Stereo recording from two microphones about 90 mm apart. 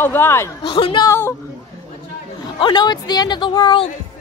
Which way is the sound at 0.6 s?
75° left (ahead or behind).